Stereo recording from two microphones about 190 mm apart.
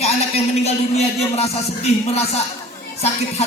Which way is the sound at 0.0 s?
35° left (ahead or behind).